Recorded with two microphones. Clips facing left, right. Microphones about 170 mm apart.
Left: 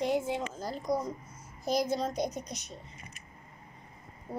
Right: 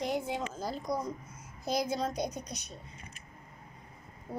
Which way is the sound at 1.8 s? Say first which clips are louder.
Left 2 dB; centre (ahead or behind).